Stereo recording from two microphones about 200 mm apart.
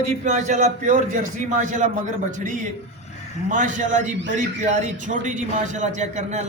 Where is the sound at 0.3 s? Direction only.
40° right (ahead or behind).